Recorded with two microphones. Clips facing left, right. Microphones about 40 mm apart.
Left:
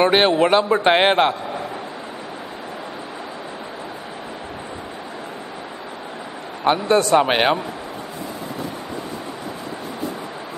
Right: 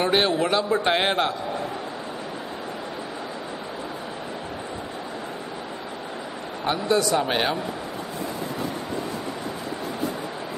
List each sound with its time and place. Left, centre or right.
0.0 s a man's voice: left
6.6 s a man's voice: left